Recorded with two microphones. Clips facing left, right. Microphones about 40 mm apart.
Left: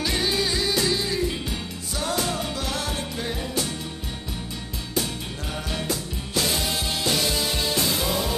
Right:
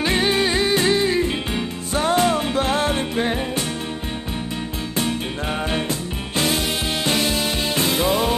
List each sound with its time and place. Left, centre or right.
0.0 s music: right
4.9 s music: right
7.7 s music: right